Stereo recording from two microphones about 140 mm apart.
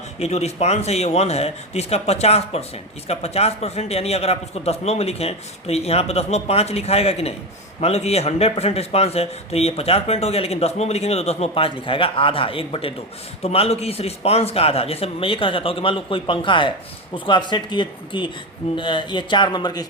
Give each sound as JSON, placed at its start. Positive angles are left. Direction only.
{"t": 0.2, "sound": "a man's voice", "side_deg": 50}